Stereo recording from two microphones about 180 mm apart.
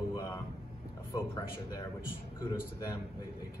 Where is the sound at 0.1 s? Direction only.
15° left (ahead or behind).